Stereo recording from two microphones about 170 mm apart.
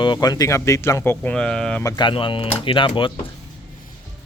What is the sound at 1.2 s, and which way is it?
Speech, 5° left (ahead or behind).